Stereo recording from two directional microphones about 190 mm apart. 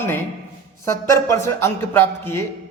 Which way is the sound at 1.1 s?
15° left (ahead or behind).